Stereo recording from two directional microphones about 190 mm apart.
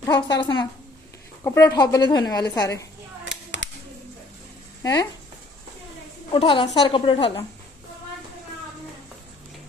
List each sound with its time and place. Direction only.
0.0 s a woman's voice: 20° left (ahead or behind)
4.8 s speech: 15° left (ahead or behind)
6.3 s a woman's voice: 25° left (ahead or behind)